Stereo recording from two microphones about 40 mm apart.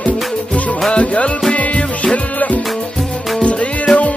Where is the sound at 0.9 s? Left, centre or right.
Left.